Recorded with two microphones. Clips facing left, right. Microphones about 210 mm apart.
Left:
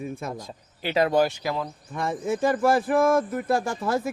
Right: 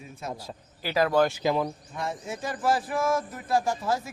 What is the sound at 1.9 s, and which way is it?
Speech, 55° left (ahead or behind).